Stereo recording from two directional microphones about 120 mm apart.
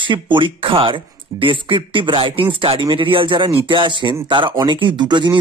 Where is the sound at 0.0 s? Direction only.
45° right (ahead or behind).